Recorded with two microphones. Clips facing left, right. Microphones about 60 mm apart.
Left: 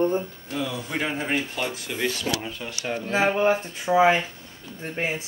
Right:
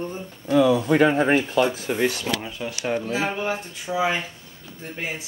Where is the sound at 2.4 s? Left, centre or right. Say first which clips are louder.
Right 2 dB; centre.